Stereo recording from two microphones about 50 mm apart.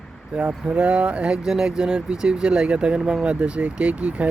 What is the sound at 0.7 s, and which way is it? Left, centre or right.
Speech, right.